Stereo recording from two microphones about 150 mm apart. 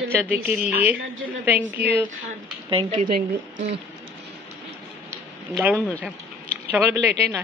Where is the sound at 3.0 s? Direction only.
60° right (ahead or behind).